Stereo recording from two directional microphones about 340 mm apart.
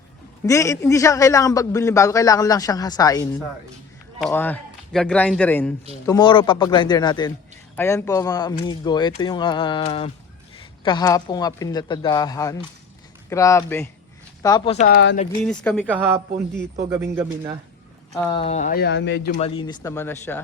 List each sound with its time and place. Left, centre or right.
0.4 s a man's voice: centre; by 15.3 s left
15.4 s a man's voice: centre
18.3 s speech: centre
19.4 s a man's voice: centre